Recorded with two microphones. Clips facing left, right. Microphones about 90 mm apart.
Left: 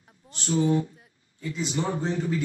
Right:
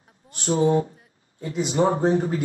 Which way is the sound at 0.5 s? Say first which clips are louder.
Right 4 dB; 35° right (ahead or behind).